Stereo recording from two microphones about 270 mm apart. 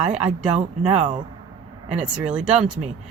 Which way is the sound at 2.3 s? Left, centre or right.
Centre.